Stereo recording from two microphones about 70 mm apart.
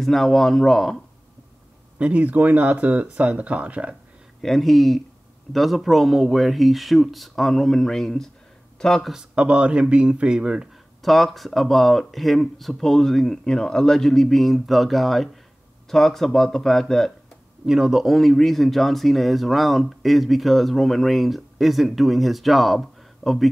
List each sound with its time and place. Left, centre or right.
0.0 s speech: centre
2.0 s speech: centre
4.4 s speech: centre
9.1 s a man's voice: centre
11.0 s speech: centre
17.6 s speech: centre